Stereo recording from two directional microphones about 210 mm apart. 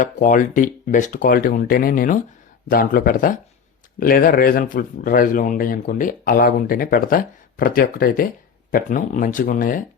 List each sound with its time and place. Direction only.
0.0 s speech: 40° left (ahead or behind)